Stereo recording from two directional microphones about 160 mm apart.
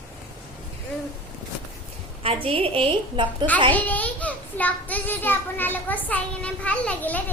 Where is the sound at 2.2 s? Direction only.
35° right (ahead or behind).